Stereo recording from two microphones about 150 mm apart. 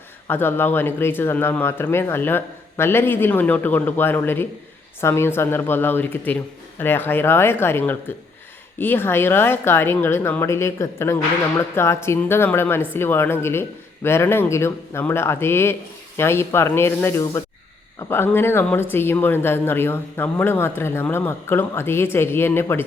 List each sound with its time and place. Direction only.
0.3 s a woman's voice: 15° left (ahead or behind)